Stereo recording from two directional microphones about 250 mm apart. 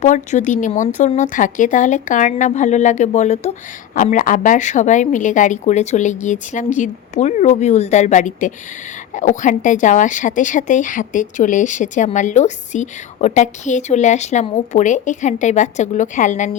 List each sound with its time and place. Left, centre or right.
0.0 s a woman's voice: left